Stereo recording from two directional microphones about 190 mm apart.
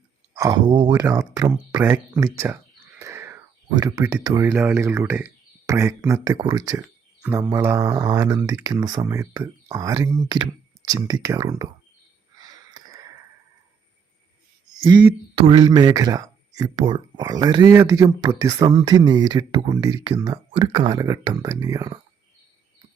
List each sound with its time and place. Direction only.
0.3 s speech: 20° right (ahead or behind)
1.4 s speech: 15° right (ahead or behind)
3.0 s a sound: 15° right (ahead or behind)
3.8 s speech: 20° right (ahead or behind)
12.4 s a sound: 20° right (ahead or behind)
14.8 s speech: 10° right (ahead or behind)
15.4 s speech: 25° right (ahead or behind)